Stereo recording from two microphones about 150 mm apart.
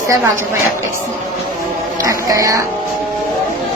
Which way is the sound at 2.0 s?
25° right (ahead or behind).